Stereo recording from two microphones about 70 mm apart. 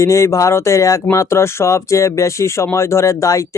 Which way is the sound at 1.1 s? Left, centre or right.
Left.